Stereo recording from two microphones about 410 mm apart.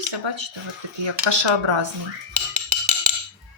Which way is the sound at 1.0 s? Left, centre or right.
Right.